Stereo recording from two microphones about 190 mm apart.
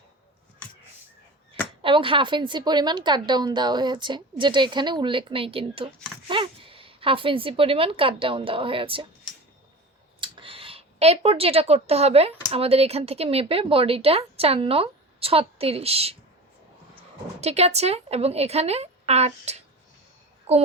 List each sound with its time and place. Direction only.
1.8 s a woman's voice: 25° right (ahead or behind)
10.2 s speech: 25° right (ahead or behind)
17.4 s speech: 35° right (ahead or behind)